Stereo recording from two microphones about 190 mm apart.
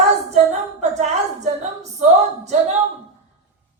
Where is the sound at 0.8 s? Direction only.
35° right (ahead or behind).